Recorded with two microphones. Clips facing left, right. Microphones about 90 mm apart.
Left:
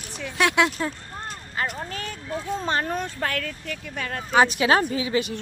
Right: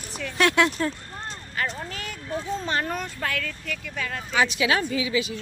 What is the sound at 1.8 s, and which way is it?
Speech, 35° left (ahead or behind).